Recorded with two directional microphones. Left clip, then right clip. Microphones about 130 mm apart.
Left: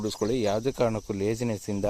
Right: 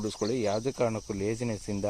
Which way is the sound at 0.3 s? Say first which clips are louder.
Left 3 dB; 45° left (ahead or behind).